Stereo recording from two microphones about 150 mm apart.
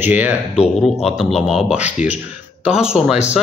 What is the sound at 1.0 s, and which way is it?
Speech, centre (ahead or behind).